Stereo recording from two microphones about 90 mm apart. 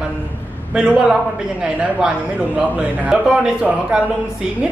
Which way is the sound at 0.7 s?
10° right (ahead or behind).